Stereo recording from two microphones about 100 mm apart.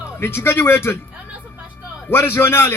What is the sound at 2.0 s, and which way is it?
Music, 25° left (ahead or behind).